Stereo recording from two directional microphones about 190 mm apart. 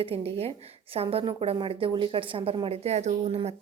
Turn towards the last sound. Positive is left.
turn(degrees=-35)  # may be behind; listen again after turning